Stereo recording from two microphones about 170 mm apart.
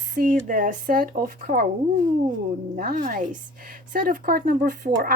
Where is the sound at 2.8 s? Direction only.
50° right (ahead or behind).